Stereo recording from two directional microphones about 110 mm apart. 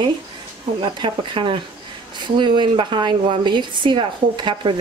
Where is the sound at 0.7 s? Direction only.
45° right (ahead or behind).